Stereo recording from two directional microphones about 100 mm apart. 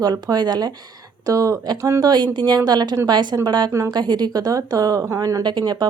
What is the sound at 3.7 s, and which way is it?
Speech, 30° right (ahead or behind).